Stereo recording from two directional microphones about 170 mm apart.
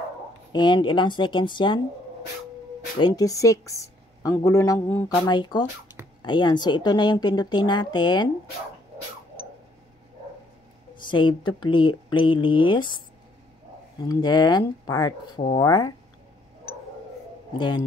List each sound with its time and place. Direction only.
0.5 s a woman's voice: 25° left (ahead or behind)
3.0 s a woman's voice: 20° left (ahead or behind)
5.2 s a woman's voice: 25° left (ahead or behind)
11.1 s a woman's voice: 30° left (ahead or behind)
14.0 s a woman's voice: 25° left (ahead or behind)